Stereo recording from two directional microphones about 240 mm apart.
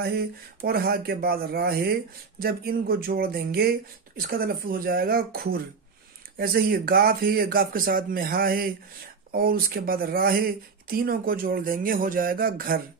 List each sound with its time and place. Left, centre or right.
0.0 s speech: right